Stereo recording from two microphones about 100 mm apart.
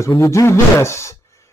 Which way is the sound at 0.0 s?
30° left (ahead or behind).